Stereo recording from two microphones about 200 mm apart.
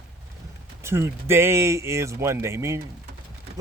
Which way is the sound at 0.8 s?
10° right (ahead or behind).